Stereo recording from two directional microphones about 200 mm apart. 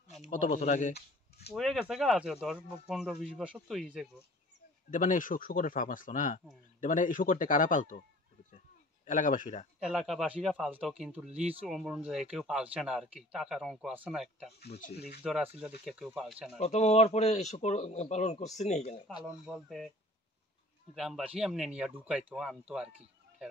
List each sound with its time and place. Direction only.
0.2 s a man's voice: 40° left (ahead or behind)
1.5 s speech: centre (ahead or behind)
4.9 s a man's voice: 40° left (ahead or behind)
9.0 s a man's voice: 40° left (ahead or behind)
9.8 s speech: centre (ahead or behind)
16.5 s a man's voice: 35° left (ahead or behind)
19.2 s speech: 5° right (ahead or behind)
20.9 s speech: centre (ahead or behind)